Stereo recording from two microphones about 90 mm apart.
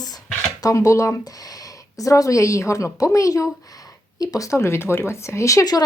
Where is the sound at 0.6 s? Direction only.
40° left (ahead or behind).